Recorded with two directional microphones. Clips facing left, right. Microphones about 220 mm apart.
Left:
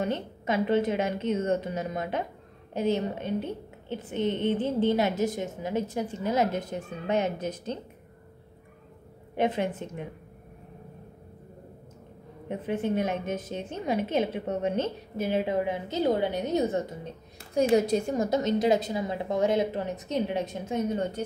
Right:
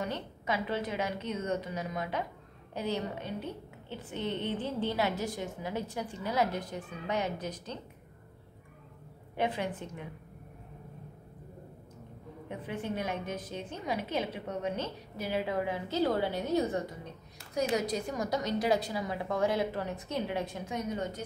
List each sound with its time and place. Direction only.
0.0 s a woman's voice: 25° left (ahead or behind)
9.4 s a woman's voice: 20° left (ahead or behind)
12.4 s a woman's voice: 25° left (ahead or behind)